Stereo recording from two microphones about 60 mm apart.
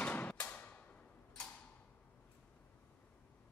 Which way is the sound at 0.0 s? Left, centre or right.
Left.